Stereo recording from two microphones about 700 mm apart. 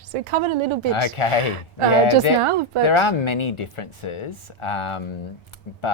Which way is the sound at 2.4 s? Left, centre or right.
Right.